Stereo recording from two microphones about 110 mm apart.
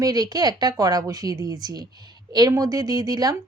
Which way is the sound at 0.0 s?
35° right (ahead or behind).